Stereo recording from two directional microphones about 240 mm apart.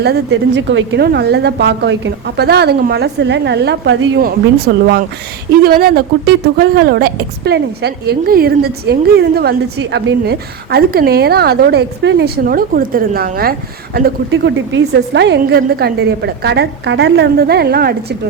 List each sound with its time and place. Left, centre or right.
0.0 s a woman's voice: right
4.2 s a woman's voice: right